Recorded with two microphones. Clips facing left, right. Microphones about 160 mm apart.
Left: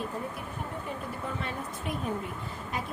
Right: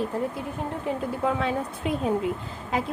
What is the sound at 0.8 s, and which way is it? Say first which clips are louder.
A woman's voice: right 10 dB; 90° right.